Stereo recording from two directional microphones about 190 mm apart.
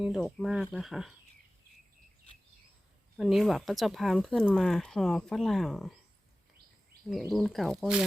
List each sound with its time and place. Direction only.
0.0 s speech: centre (ahead or behind)
3.2 s speech: centre (ahead or behind)
7.1 s speech: centre (ahead or behind)